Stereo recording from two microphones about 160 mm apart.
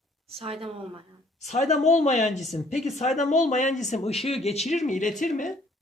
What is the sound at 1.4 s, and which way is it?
Speech, 45° left (ahead or behind).